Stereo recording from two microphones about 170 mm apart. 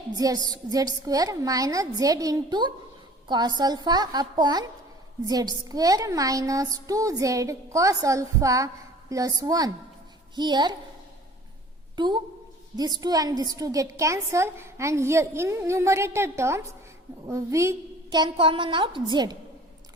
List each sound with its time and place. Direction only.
0.2 s speech: 20° right (ahead or behind)
11.9 s a woman's voice: 25° right (ahead or behind)